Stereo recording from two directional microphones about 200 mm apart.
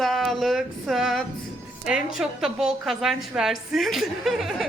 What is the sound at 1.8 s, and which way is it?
A woman's voice, 5° right (ahead or behind).